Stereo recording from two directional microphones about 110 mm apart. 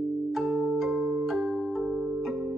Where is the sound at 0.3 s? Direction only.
Centre (ahead or behind).